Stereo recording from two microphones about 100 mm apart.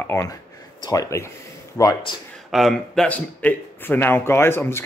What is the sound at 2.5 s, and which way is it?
Speech, 5° left (ahead or behind).